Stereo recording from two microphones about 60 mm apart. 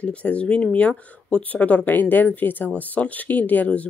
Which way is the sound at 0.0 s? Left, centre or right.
Left.